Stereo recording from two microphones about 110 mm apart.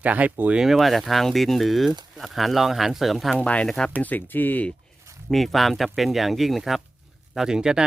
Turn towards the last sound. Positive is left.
turn(degrees=-5)  # may be behind; listen again after turning